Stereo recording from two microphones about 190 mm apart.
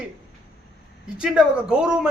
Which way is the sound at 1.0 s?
5° right (ahead or behind).